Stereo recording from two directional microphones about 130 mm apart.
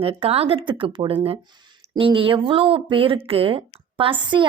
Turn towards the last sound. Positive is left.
turn(degrees=-40)  # may be behind; listen again after turning